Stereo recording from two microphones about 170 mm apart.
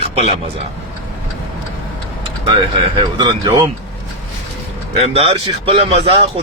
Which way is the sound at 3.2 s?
20° right (ahead or behind).